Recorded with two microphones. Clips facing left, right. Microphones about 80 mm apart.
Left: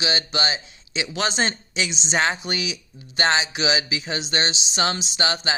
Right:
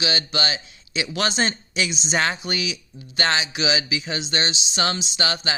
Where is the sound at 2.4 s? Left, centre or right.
Left.